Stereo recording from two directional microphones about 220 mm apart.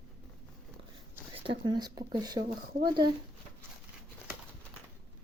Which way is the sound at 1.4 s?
20° right (ahead or behind).